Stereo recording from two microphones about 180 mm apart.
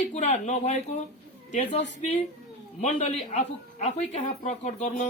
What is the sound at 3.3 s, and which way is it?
Speech, 40° left (ahead or behind).